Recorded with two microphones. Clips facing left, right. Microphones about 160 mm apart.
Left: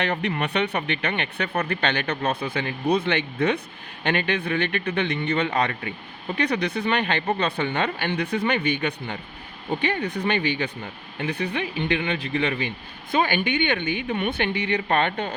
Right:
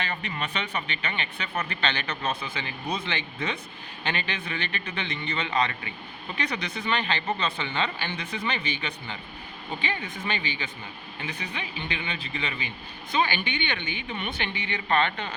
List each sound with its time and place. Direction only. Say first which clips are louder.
0.0 s speech: left 7 dB; 65° left (ahead or behind); by 15.4 s 50° left (ahead or behind)